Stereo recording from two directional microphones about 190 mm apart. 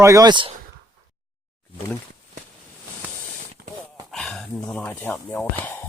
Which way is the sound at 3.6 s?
55° right (ahead or behind).